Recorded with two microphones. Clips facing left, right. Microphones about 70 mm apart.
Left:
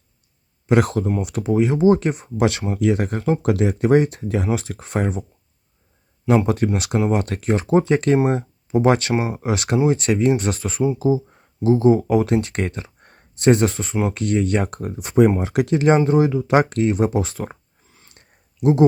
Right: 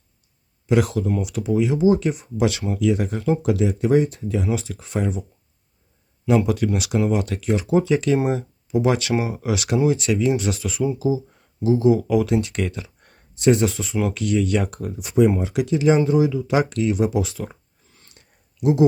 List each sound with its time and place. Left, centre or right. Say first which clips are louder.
0.7 s speech: left 2 dB; left
6.2 s speech: left 1 dB; left
9.1 s speech: left 1 dB; left
13.3 s speech: left 2 dB; left
18.1 s a sound: left 2 dB; left